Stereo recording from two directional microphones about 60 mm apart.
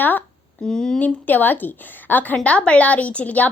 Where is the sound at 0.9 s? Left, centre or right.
Left.